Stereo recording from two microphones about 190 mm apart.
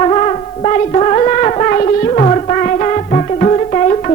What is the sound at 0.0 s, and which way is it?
Music, 35° left (ahead or behind).